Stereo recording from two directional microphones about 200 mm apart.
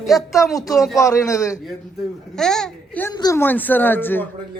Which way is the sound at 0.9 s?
15° left (ahead or behind).